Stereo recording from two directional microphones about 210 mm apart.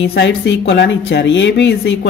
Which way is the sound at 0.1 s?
55° left (ahead or behind).